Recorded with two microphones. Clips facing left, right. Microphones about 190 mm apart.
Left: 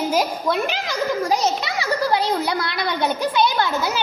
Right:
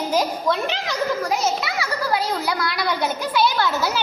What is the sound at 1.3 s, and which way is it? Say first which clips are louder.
A child's voice: left 2 dB; 25° left (ahead or behind).